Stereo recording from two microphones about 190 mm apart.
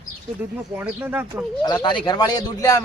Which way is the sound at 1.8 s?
25° left (ahead or behind).